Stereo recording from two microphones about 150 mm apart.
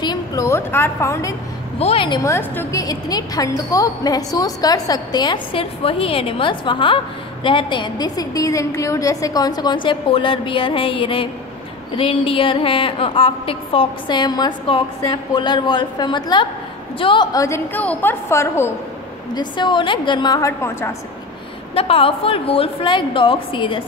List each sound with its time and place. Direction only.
0.0 s a woman's voice: 25° left (ahead or behind)
1.8 s a woman's voice: 40° left (ahead or behind); by 18.7 s 15° left (ahead or behind)
19.3 s a woman's voice: 30° left (ahead or behind)
21.7 s a woman's voice: 40° left (ahead or behind)